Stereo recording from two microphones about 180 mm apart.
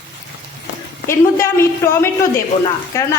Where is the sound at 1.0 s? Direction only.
15° left (ahead or behind).